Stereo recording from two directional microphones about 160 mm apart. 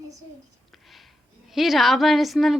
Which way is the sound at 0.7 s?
Centre (ahead or behind).